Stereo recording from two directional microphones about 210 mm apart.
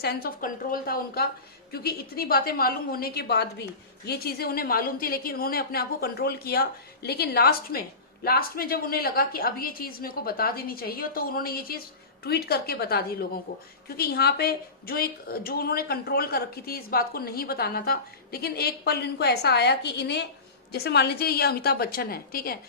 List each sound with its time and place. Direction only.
0.0 s speech: 50° left (ahead or behind)